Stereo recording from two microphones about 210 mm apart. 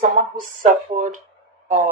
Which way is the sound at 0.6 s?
40° right (ahead or behind).